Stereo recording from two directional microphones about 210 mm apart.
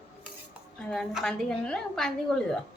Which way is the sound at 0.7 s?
5° left (ahead or behind).